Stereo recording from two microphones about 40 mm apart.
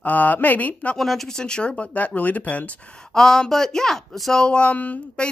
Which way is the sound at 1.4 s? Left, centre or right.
Left.